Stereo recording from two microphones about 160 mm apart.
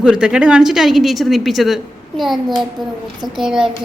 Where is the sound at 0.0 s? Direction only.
5° right (ahead or behind).